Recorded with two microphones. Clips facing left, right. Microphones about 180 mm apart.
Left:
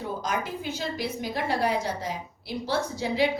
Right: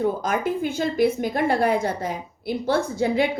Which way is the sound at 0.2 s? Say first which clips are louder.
Right 7 dB; 50° right (ahead or behind).